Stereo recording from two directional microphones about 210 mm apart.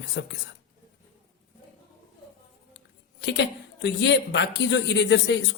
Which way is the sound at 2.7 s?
55° left (ahead or behind).